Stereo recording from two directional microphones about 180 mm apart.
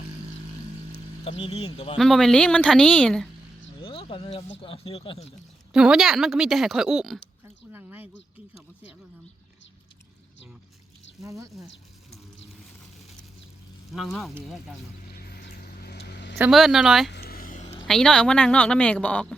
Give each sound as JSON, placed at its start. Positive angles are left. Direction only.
{"t": 0.9, "sound": "speech", "side_deg": 35}
{"t": 2.0, "sound": "a woman's voice", "side_deg": 0}
{"t": 3.8, "sound": "a sound", "side_deg": 30}
{"t": 4.6, "sound": "speech", "side_deg": 30}
{"t": 5.7, "sound": "a woman's voice", "side_deg": -5}
{"t": 7.4, "sound": "a sound", "side_deg": -10}
{"t": 11.2, "sound": "speech", "side_deg": -20}
{"t": 13.9, "sound": "a woman's voice", "side_deg": 0}
{"t": 15.1, "sound": "vehicle", "side_deg": 60}
{"t": 16.4, "sound": "a woman's voice", "side_deg": 0}
{"t": 17.1, "sound": "a sound", "side_deg": 60}
{"t": 17.8, "sound": "a woman's voice", "side_deg": 5}